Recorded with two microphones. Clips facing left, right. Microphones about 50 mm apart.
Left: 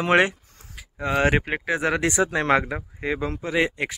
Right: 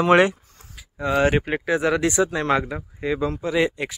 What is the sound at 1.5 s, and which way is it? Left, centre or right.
Speech, left.